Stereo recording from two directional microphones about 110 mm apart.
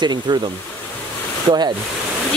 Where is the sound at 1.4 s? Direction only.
40° right (ahead or behind).